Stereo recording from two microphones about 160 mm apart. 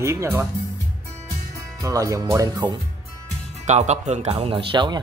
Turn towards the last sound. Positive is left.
turn(degrees=-30)  # may be behind; listen again after turning